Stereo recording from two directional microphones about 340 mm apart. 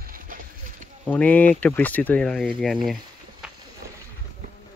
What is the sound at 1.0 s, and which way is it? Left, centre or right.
Speech, centre.